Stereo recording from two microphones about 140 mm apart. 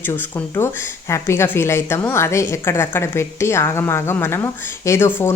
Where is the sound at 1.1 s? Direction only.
20° left (ahead or behind).